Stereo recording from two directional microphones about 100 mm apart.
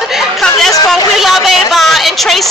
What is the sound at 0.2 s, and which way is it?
Chatter, centre (ahead or behind).